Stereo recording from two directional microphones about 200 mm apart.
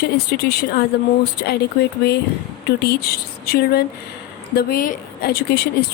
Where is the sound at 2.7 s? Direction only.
50° left (ahead or behind).